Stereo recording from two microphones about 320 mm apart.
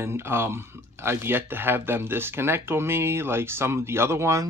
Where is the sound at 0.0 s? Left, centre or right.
Centre.